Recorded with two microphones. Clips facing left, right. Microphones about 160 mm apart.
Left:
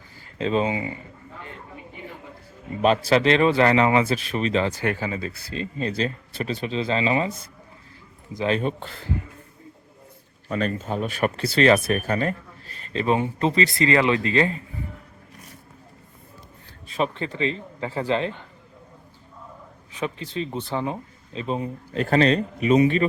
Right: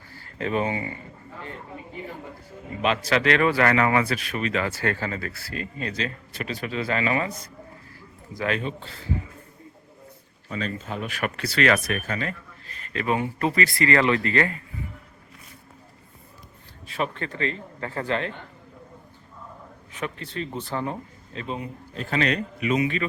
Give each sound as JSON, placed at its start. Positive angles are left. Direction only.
{"t": 0.2, "sound": "speech", "side_deg": 20}
{"t": 2.8, "sound": "speech", "side_deg": 35}
{"t": 5.7, "sound": "speech", "side_deg": 30}
{"t": 8.6, "sound": "a man's voice", "side_deg": 55}
{"t": 10.8, "sound": "speech", "side_deg": 35}
{"t": 17.0, "sound": "speech", "side_deg": 25}
{"t": 17.8, "sound": "speech", "side_deg": 10}
{"t": 20.0, "sound": "speech", "side_deg": 30}
{"t": 21.4, "sound": "a man's voice", "side_deg": 30}